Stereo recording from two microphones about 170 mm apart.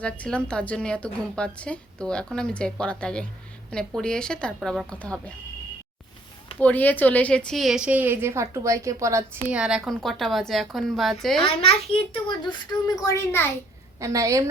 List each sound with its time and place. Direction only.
0.0 s a woman's voice: 5° left (ahead or behind)
6.6 s a woman's voice: 10° left (ahead or behind)
11.4 s a child's voice: 35° left (ahead or behind)
13.0 s a child's voice: 20° left (ahead or behind)
14.0 s a woman's voice: 20° right (ahead or behind)